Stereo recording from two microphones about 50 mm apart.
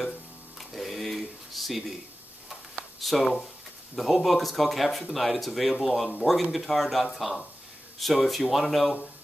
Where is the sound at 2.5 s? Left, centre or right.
Centre.